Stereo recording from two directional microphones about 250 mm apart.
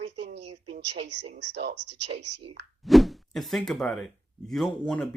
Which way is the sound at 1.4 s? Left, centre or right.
Right.